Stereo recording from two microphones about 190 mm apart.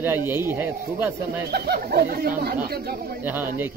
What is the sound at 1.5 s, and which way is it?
Speech, 55° right (ahead or behind).